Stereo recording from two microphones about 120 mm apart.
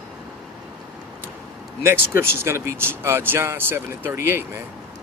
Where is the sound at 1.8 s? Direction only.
20° right (ahead or behind).